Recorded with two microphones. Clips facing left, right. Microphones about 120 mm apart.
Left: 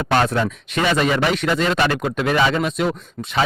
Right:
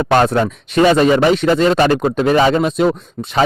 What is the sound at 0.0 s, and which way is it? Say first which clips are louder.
Speech: right 5 dB; 40° right (ahead or behind).